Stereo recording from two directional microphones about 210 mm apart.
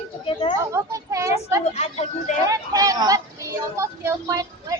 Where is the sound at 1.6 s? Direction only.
30° left (ahead or behind).